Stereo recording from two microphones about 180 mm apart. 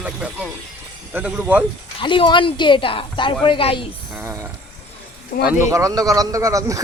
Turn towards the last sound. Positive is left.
turn(degrees=-20)  # may be behind; listen again after turning